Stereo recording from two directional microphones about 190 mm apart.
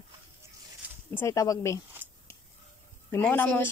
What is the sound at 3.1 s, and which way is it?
Speech, 10° left (ahead or behind).